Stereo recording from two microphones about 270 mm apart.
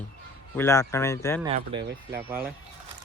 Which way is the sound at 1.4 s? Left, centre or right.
Centre.